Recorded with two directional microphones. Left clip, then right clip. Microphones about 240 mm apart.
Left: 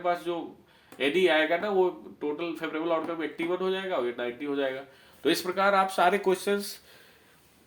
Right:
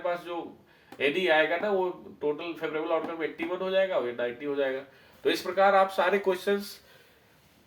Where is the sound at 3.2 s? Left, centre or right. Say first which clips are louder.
Left 1 dB; left.